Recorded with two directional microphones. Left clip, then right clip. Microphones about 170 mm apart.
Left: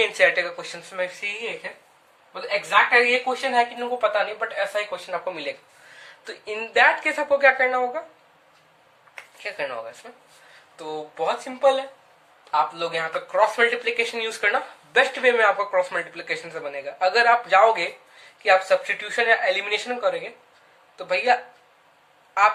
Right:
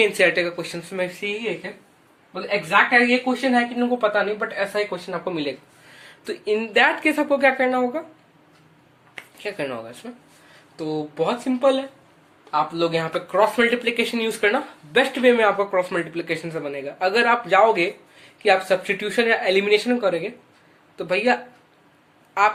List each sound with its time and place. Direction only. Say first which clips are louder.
0.0 s speech: right 1 dB; 15° right (ahead or behind)
3.1 s speech: right 2 dB; 15° right (ahead or behind)
6.2 s speech: right 7 dB; 10° right (ahead or behind)
9.4 s speech: right 1 dB; 10° right (ahead or behind)
10.8 s speech: right 4 dB; 35° right (ahead or behind)
12.7 s speech: right 4 dB; 25° right (ahead or behind); by 17.8 s 5° right (ahead or behind)
18.4 s speech: even; 20° right (ahead or behind)
22.4 s speech: even; 10° right (ahead or behind)